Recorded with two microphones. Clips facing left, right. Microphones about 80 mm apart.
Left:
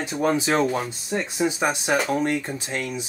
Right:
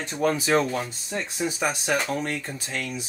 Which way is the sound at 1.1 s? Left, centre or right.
Left.